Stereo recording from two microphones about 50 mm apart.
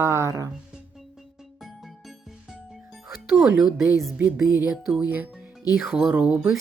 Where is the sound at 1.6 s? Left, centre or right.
Centre.